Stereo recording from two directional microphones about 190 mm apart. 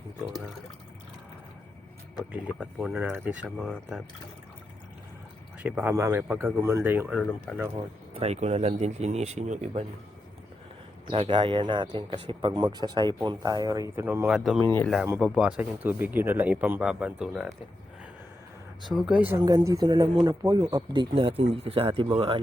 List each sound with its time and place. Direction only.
2.3 s speech: 5° right (ahead or behind)
5.6 s speech: 10° right (ahead or behind)
7.2 s speech: 5° left (ahead or behind)
8.1 s speech: 35° right (ahead or behind)
11.1 s speech: 30° right (ahead or behind); by 14.6 s centre (ahead or behind)
14.6 s speech: 10° left (ahead or behind)
15.2 s speech: 5° right (ahead or behind)
18.9 s speech: 5° right (ahead or behind)
19.4 s speech: 20° right (ahead or behind)